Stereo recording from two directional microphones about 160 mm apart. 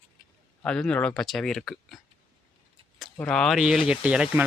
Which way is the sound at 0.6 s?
5° left (ahead or behind).